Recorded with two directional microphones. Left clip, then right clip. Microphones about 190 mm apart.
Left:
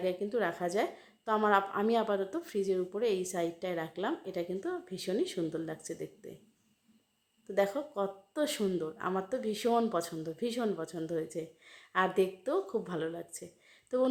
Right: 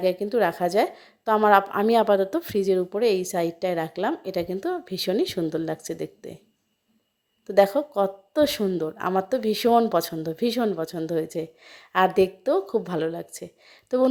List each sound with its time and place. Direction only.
0.0 s a woman's voice: 35° right (ahead or behind)
7.4 s a woman's voice: 40° right (ahead or behind)